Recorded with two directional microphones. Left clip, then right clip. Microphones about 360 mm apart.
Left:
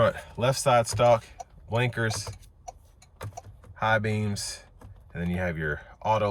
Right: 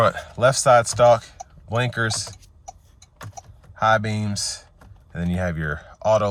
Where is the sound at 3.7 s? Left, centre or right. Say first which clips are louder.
Right 6 dB; centre.